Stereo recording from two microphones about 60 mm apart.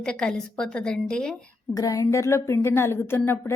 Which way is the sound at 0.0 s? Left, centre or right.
Centre.